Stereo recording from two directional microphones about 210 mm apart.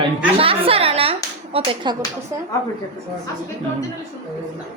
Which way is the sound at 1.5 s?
20° right (ahead or behind).